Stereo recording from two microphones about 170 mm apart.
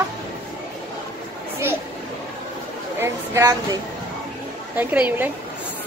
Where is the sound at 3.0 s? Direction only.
20° right (ahead or behind).